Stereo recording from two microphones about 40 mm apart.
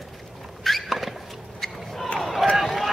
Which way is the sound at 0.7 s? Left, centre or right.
Centre.